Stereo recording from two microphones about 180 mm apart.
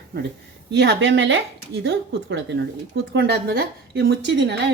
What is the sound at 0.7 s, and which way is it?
Speech, 75° right (ahead or behind).